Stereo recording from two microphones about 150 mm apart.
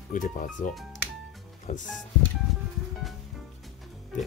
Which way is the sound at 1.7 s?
55° left (ahead or behind).